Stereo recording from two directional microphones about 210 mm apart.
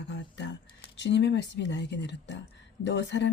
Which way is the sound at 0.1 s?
55° left (ahead or behind).